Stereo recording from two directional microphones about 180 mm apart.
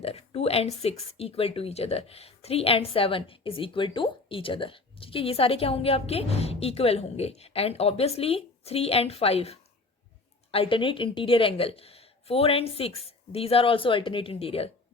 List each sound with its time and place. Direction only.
0.0 s speech: 35° left (ahead or behind)